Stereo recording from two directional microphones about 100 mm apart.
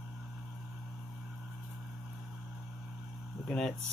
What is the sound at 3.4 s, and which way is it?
Speech, 5° left (ahead or behind).